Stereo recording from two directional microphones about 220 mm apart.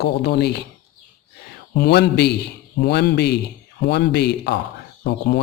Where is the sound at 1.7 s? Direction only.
50° left (ahead or behind).